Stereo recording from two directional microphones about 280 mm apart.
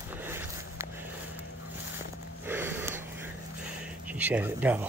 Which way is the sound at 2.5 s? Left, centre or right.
Centre.